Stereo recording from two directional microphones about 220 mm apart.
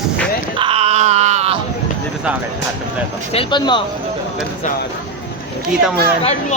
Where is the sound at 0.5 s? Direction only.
25° right (ahead or behind).